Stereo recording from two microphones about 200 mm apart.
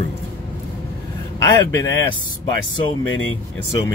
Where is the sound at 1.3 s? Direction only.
20° left (ahead or behind).